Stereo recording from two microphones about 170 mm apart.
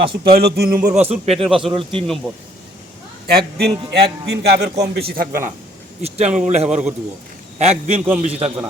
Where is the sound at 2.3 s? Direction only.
5° left (ahead or behind).